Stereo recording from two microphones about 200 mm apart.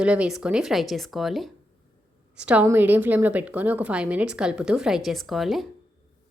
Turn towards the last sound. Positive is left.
turn(degrees=0)  # may be behind; listen again after turning